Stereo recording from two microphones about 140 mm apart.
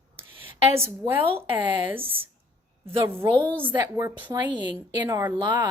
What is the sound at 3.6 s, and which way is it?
Speech, 30° right (ahead or behind).